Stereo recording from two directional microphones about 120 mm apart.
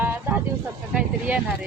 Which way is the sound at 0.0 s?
15° right (ahead or behind).